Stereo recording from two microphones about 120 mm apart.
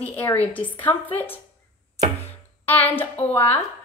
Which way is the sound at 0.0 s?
15° left (ahead or behind).